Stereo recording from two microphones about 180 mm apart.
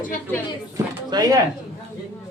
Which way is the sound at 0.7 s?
20° right (ahead or behind).